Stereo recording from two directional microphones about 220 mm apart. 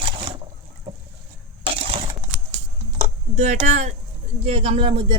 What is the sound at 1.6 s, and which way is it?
Crushing, 25° right (ahead or behind).